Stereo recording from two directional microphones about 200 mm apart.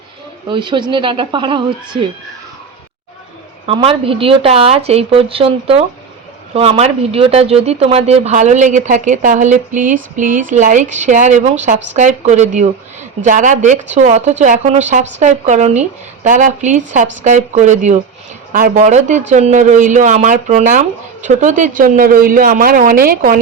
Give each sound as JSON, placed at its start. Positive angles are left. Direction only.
{"t": 0.4, "sound": "speech", "side_deg": -25}
{"t": 3.7, "sound": "speech", "side_deg": -25}